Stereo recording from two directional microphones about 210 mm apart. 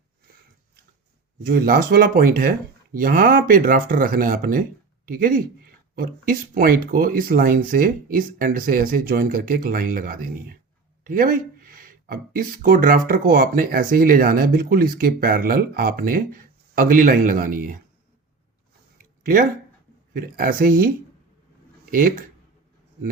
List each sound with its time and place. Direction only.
1.5 s speech: 45° right (ahead or behind)
19.2 s speech: 40° right (ahead or behind)